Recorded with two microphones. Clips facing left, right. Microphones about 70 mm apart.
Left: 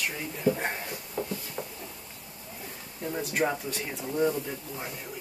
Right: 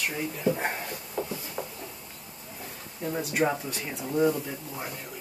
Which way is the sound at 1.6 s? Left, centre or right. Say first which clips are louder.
Right 4 dB; centre.